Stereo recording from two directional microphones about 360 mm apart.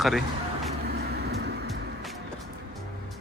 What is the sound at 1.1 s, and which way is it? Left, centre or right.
Vehicle, right.